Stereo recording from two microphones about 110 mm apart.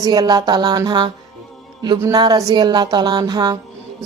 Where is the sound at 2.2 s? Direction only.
40° right (ahead or behind).